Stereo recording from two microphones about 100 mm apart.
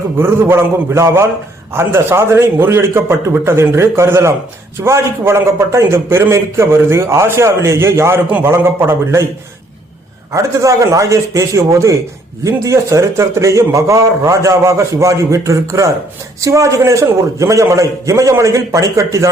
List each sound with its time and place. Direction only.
0.2 s a man's voice: 25° right (ahead or behind)
10.3 s a man's voice: 30° right (ahead or behind)